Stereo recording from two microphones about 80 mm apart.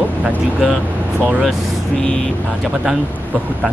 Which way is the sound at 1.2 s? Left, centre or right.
Right.